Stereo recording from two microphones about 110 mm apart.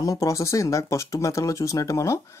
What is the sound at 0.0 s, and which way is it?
Speech, 30° left (ahead or behind).